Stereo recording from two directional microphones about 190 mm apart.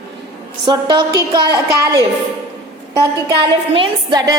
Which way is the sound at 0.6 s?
25° right (ahead or behind).